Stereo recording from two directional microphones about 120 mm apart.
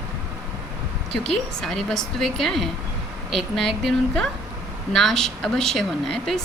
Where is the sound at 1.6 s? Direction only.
5° left (ahead or behind).